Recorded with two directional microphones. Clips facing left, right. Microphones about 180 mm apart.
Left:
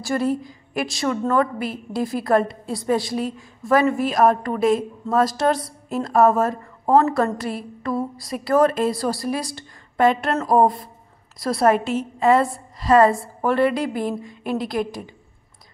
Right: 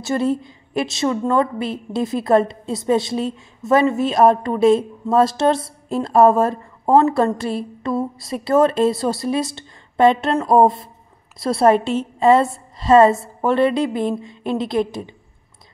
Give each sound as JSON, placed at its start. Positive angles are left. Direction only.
{"t": 0.0, "sound": "a woman's voice", "side_deg": -25}